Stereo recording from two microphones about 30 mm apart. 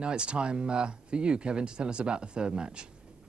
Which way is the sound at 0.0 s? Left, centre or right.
Right.